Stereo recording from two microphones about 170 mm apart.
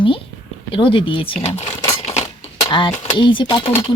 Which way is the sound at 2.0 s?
35° left (ahead or behind).